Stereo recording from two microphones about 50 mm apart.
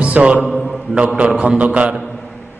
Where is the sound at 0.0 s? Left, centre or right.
Right.